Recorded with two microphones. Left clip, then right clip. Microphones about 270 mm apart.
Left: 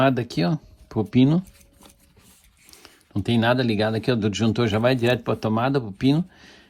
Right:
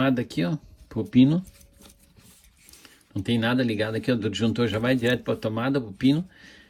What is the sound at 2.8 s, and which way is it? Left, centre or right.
Speech, centre.